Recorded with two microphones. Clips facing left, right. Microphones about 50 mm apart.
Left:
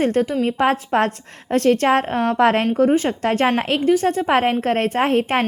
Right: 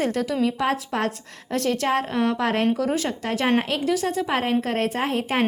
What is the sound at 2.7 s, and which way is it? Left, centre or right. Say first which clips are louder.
Speech: left 7 dB; left.